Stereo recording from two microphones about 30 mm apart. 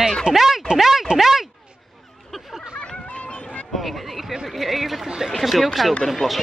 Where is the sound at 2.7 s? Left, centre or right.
Left.